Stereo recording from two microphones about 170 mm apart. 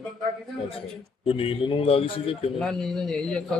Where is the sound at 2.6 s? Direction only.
5° left (ahead or behind).